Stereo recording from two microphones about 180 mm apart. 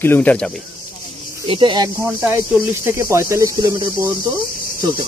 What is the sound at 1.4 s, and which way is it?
Speech, 30° right (ahead or behind).